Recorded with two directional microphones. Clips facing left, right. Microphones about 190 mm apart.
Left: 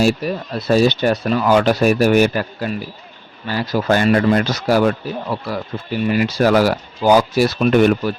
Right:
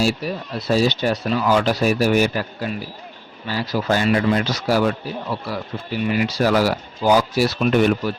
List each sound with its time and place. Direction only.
0.0 s speech: 50° left (ahead or behind)